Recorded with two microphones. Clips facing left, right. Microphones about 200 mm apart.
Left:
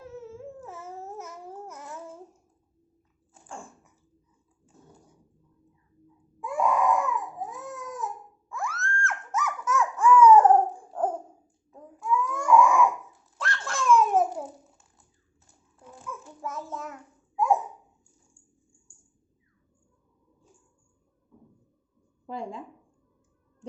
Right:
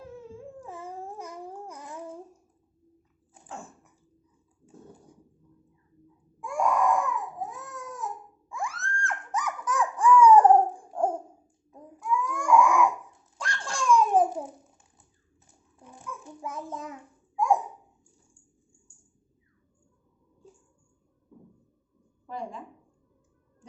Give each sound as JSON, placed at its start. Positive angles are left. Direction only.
{"t": 0.0, "sound": "babbling", "side_deg": -15}
{"t": 6.4, "sound": "baby cry", "side_deg": 5}
{"t": 7.3, "sound": "baby cry", "side_deg": 15}
{"t": 8.4, "sound": "a sound", "side_deg": -15}
{"t": 11.7, "sound": "babbling", "side_deg": -15}
{"t": 12.4, "sound": "crying", "side_deg": 0}
{"t": 13.4, "sound": "a sound", "side_deg": -15}
{"t": 16.2, "sound": "child singing", "side_deg": -15}
{"t": 17.3, "sound": "babbling", "side_deg": 5}
{"t": 22.3, "sound": "a sound", "side_deg": 25}